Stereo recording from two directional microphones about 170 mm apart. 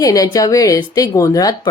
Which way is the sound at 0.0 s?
20° left (ahead or behind).